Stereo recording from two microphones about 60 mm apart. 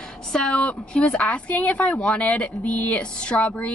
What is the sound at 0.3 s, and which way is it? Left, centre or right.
Speech, centre.